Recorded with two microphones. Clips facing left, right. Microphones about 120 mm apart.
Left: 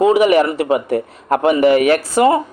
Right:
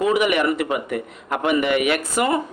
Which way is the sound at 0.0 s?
30° left (ahead or behind).